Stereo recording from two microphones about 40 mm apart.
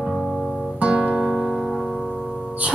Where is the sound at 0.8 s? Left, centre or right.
Right.